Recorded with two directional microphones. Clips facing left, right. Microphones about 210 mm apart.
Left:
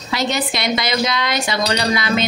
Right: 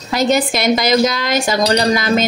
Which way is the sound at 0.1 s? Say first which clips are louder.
Right 6 dB; 45° right (ahead or behind).